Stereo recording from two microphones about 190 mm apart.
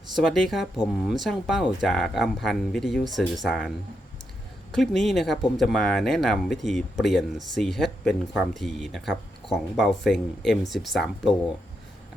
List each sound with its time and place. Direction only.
0.2 s speech: centre (ahead or behind)
4.7 s speech: centre (ahead or behind)